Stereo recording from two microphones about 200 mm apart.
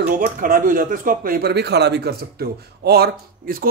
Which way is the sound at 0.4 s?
45° right (ahead or behind).